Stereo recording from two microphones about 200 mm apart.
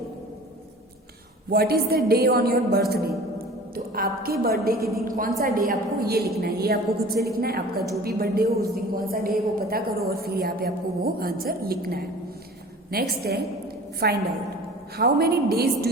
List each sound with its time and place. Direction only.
1.5 s a woman's voice: 50° right (ahead or behind)